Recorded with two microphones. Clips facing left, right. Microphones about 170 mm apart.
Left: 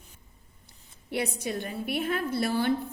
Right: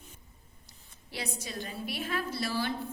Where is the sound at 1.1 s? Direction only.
60° left (ahead or behind).